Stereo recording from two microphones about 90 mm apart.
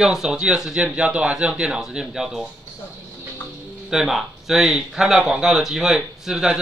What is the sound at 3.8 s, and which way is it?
Speech, 5° right (ahead or behind).